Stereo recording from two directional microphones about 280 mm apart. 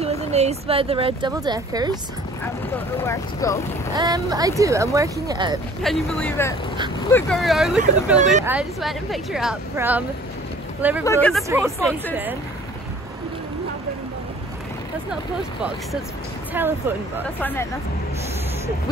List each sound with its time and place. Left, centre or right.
0.0 s speech: right
3.0 s speech: centre
3.9 s speech: centre
5.8 s speech: centre
8.2 s speech: right
8.5 s speech: centre
11.1 s speech: centre
11.4 s speech: centre
16.6 s speech: centre
17.4 s speech: centre